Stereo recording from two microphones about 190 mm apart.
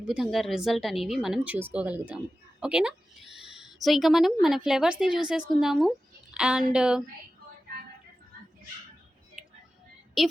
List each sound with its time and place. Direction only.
0.0 s speech: 5° right (ahead or behind)
9.4 s a sound: centre (ahead or behind)
10.2 s speech: centre (ahead or behind)